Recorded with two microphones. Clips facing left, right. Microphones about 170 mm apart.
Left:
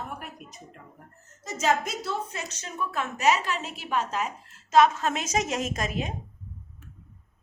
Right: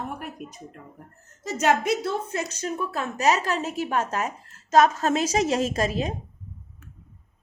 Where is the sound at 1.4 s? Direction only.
65° right (ahead or behind).